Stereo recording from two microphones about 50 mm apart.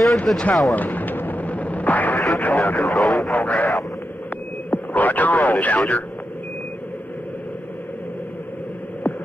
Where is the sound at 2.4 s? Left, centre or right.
Left.